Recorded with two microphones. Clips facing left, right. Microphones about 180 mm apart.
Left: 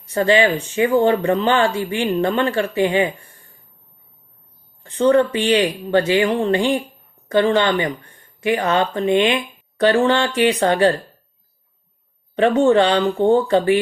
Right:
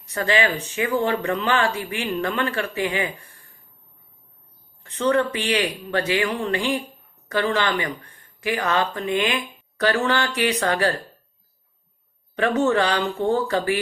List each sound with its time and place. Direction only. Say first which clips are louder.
0.1 s speech: left 6 dB; 30° left (ahead or behind)
4.8 s speech: left 6 dB; 35° left (ahead or behind)
12.4 s speech: left 6 dB; 30° left (ahead or behind)